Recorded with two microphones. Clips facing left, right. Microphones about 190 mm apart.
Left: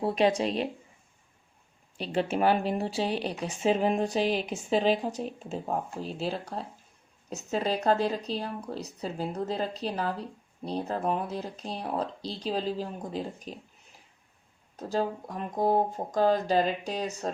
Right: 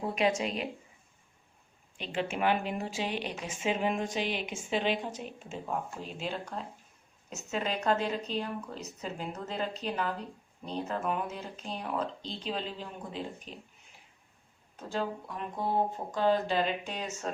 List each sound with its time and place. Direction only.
0.0 s speech: 35° left (ahead or behind)
2.0 s speech: 35° left (ahead or behind)
14.8 s speech: 40° left (ahead or behind)